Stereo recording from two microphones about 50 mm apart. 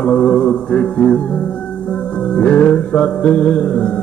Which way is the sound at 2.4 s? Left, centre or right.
Left.